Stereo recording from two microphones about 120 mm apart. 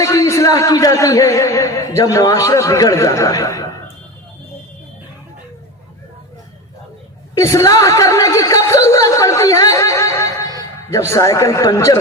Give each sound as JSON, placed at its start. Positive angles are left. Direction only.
{"t": 0.0, "sound": "speech", "side_deg": 25}
{"t": 7.3, "sound": "a sound", "side_deg": 25}
{"t": 11.1, "sound": "speech", "side_deg": 25}